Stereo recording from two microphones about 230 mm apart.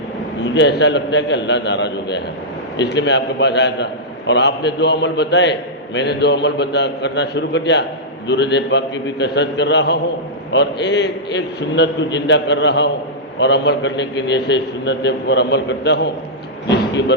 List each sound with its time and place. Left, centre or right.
0.4 s a man's voice: left